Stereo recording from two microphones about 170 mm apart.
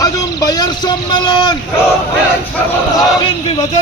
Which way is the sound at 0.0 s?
20° left (ahead or behind).